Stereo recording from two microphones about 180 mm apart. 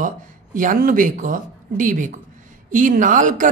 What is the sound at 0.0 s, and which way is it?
A woman's voice, 45° right (ahead or behind).